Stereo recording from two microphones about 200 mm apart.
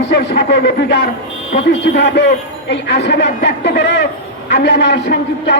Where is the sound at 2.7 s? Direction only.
60° left (ahead or behind).